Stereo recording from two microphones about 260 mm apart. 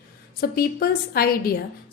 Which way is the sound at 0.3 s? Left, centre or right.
Left.